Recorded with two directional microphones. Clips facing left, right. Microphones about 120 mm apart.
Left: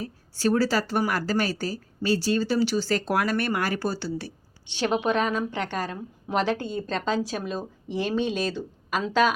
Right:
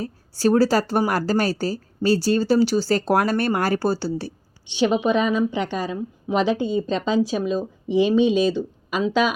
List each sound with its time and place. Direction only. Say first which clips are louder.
0.0 s speech: right 5 dB; 35° right (ahead or behind)
4.8 s speech: right 5 dB; 5° right (ahead or behind)